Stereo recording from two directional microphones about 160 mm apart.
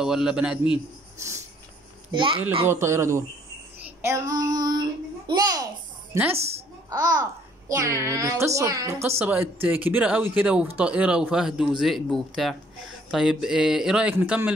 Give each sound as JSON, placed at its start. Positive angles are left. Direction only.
{"t": 0.0, "sound": "speech", "side_deg": -5}
{"t": 2.1, "sound": "a woman's voice", "side_deg": -30}
{"t": 2.6, "sound": "speech", "side_deg": -15}
{"t": 4.0, "sound": "child singing", "side_deg": -20}
{"t": 6.3, "sound": "a woman's voice", "side_deg": -40}
{"t": 6.9, "sound": "a child's voice", "side_deg": -20}